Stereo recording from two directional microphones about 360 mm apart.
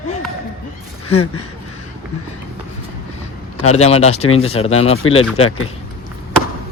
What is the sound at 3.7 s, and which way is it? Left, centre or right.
Speech, centre.